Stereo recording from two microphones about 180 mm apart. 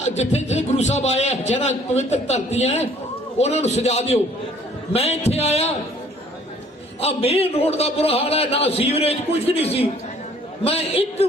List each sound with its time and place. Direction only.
0.0 s a man's voice: 40° left (ahead or behind)
7.0 s a man's voice: 35° left (ahead or behind)